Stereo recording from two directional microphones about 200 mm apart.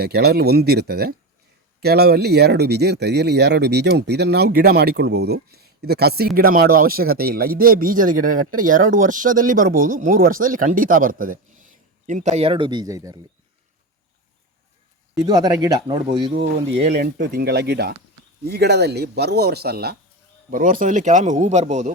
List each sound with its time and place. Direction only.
0.0 s speech: 50° right (ahead or behind); by 13.1 s 15° right (ahead or behind)
15.2 s speech: 20° right (ahead or behind)
16.9 s speech: 50° right (ahead or behind)